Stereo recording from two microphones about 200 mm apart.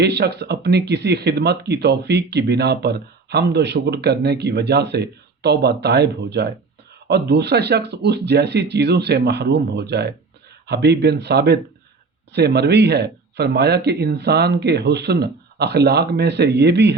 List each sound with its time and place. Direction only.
0.0 s speech: 55° right (ahead or behind)